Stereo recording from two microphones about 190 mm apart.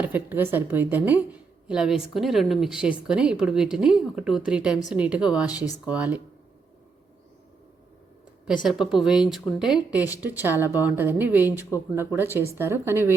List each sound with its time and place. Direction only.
0.0 s a woman's voice: 10° right (ahead or behind)
5.5 s speech: 20° left (ahead or behind)
5.8 s speech: 5° right (ahead or behind)
8.6 s speech: centre (ahead or behind)